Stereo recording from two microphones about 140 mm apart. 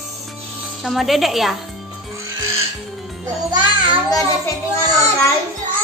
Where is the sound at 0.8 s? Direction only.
Centre (ahead or behind).